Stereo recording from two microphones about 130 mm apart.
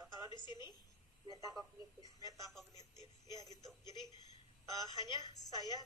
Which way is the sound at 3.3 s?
30° left (ahead or behind).